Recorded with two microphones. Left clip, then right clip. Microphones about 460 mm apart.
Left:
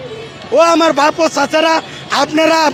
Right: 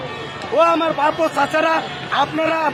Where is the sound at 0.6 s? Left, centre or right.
Left.